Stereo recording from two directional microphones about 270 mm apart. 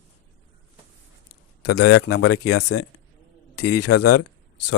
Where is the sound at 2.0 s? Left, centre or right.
Left.